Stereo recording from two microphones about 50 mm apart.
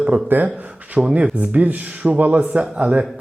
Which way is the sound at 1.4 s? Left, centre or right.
Right.